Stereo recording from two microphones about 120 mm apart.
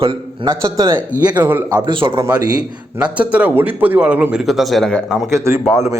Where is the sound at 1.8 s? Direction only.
40° right (ahead or behind).